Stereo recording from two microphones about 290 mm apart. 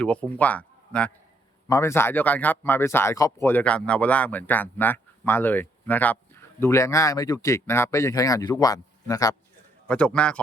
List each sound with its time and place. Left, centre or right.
0.0 s a man's voice: centre